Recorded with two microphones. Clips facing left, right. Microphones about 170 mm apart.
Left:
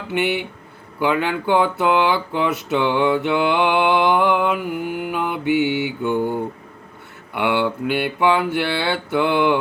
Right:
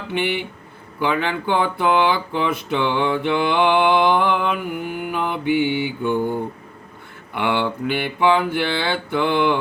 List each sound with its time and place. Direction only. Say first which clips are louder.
0.1 s speech: left 2 dB; 10° left (ahead or behind)
7.3 s speech: left 1 dB; 10° left (ahead or behind)